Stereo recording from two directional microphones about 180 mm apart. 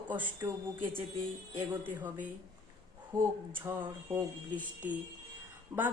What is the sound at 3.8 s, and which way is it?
Speech, 15° right (ahead or behind).